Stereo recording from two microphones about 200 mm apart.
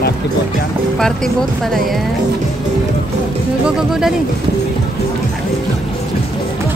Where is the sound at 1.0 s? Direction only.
Centre (ahead or behind).